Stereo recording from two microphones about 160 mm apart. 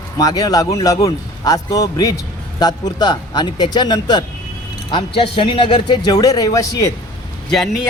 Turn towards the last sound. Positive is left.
turn(degrees=0)  # may be behind; listen again after turning